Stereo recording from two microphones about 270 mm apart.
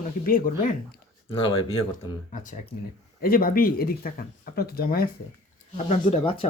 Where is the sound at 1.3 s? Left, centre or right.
Centre.